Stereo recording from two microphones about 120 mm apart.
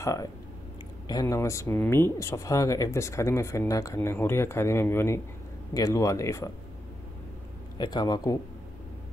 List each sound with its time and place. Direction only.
0.0 s speech: 25° left (ahead or behind)
7.7 s speech: 35° left (ahead or behind)